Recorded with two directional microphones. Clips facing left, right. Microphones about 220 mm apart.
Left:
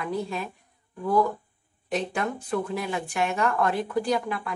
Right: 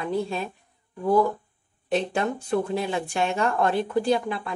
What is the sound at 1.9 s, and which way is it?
Speech, 30° right (ahead or behind).